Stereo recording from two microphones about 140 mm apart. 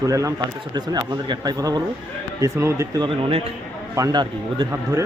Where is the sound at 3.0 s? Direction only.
40° right (ahead or behind).